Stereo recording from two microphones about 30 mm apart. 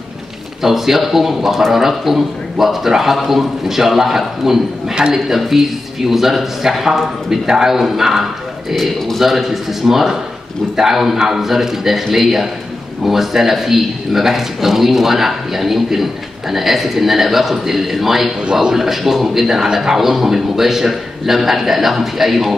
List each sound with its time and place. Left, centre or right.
0.6 s a man's voice: centre
18.5 s a man's voice: right
18.8 s a man's voice: centre